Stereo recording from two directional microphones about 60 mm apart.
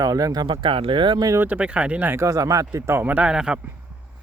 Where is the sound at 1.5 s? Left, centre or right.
Right.